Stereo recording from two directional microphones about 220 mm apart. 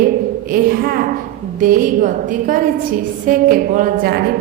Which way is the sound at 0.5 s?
40° right (ahead or behind).